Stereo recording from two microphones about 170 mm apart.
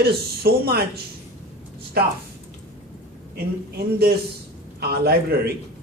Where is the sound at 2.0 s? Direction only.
65° right (ahead or behind).